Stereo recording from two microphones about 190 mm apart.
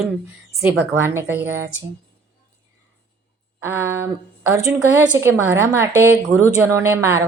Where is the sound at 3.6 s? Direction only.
15° right (ahead or behind).